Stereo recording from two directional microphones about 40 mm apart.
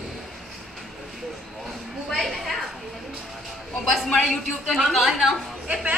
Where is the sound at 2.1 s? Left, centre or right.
Centre.